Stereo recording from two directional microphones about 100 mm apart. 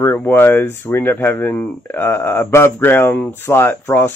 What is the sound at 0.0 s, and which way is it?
Speech, 20° left (ahead or behind).